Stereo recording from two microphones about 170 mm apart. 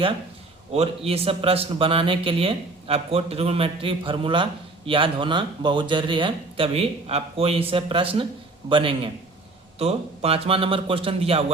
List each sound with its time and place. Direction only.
0.7 s a man's voice: 35° right (ahead or behind)